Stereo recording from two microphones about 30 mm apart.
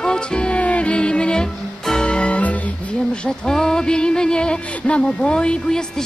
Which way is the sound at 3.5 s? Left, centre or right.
Left.